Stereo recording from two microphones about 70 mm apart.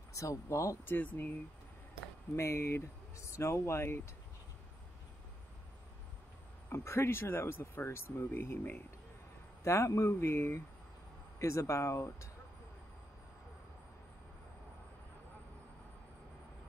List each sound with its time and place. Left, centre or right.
0.1 s speech: left
0.8 s speech: left
2.3 s speech: left
6.7 s speech: left
9.6 s speech: left